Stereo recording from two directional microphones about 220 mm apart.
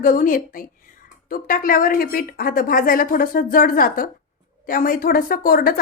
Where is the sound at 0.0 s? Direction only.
40° left (ahead or behind).